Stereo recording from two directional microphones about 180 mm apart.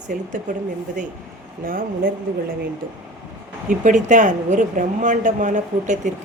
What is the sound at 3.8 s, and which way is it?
A woman's voice, 45° right (ahead or behind).